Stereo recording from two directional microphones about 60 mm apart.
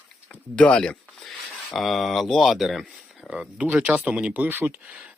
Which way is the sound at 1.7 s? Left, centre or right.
Centre.